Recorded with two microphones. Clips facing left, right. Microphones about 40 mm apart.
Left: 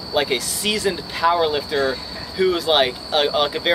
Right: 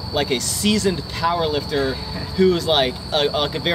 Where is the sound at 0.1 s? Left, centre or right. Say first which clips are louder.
Left 1 dB; centre.